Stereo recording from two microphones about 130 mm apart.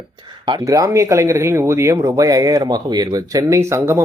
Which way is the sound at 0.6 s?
25° right (ahead or behind).